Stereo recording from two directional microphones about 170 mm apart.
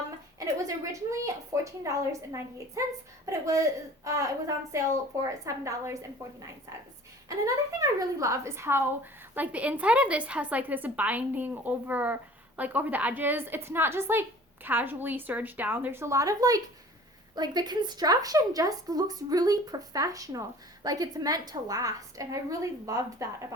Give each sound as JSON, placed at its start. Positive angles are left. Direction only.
{"t": 0.3, "sound": "a woman's voice", "side_deg": -20}
{"t": 7.3, "sound": "a woman's voice", "side_deg": -20}